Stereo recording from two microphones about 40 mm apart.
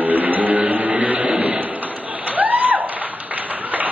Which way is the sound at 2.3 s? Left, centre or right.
Right.